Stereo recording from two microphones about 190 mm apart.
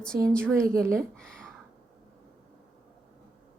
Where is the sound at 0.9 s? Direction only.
5° left (ahead or behind).